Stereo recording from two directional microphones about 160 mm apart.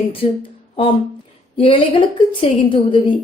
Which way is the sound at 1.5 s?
35° left (ahead or behind).